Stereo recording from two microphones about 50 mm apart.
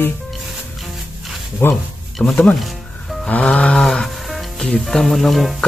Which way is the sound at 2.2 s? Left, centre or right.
Left.